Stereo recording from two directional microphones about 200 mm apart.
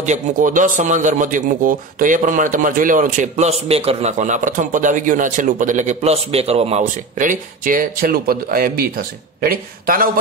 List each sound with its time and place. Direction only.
0.0 s speech: 40° right (ahead or behind)